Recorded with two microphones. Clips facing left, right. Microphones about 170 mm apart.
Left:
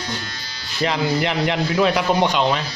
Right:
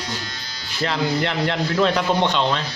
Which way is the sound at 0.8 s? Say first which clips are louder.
Left 2 dB; 15° left (ahead or behind).